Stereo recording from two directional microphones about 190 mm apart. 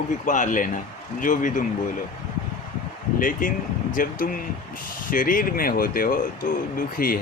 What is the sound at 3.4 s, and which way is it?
Speech, 45° left (ahead or behind).